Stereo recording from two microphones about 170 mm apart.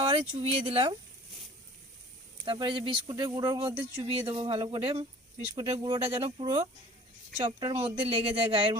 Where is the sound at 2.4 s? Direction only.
30° right (ahead or behind).